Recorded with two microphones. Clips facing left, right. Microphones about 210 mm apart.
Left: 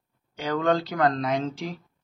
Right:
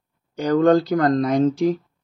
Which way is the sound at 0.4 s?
40° right (ahead or behind).